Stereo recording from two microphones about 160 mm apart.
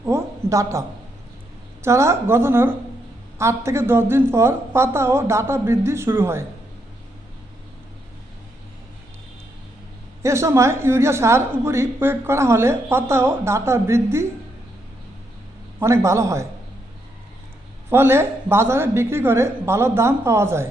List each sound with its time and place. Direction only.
0.0 s a sound: 15° right (ahead or behind)
1.8 s a woman's voice: 15° right (ahead or behind)
10.2 s a woman's voice: 15° right (ahead or behind)
15.8 s a woman's voice: 15° right (ahead or behind)
17.8 s a woman's voice: 15° right (ahead or behind)